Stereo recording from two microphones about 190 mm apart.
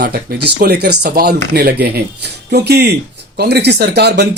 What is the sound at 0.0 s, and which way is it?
Speech, 50° right (ahead or behind).